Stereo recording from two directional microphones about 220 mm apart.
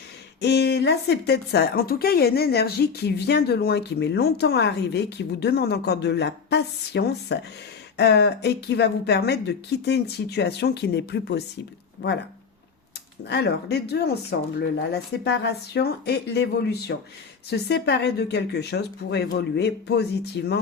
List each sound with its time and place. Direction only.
0.4 s speech: 50° left (ahead or behind)
13.2 s speech: 50° left (ahead or behind)